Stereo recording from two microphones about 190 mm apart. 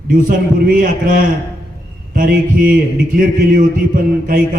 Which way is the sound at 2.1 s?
45° right (ahead or behind).